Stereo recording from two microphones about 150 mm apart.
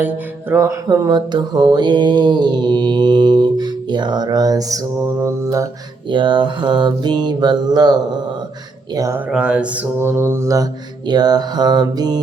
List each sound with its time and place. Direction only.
0.0 s mantra: 15° right (ahead or behind)
6.1 s mantra: 30° right (ahead or behind)
9.0 s mantra: 20° right (ahead or behind)
9.3 s mantra: 5° right (ahead or behind); by 12.2 s 25° right (ahead or behind)